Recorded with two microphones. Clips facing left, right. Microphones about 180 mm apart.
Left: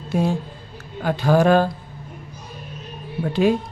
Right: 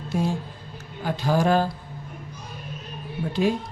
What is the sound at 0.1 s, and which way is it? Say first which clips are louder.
A woman's voice: left 4 dB; 60° left (ahead or behind).